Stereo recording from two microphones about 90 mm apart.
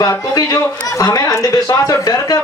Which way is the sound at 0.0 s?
40° left (ahead or behind).